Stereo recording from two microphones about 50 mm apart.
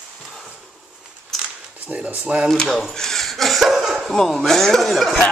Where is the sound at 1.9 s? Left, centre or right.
Right.